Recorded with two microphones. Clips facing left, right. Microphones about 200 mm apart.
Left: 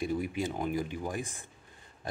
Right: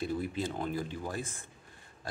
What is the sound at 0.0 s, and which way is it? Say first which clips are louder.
Speech: left 2 dB; 15° left (ahead or behind).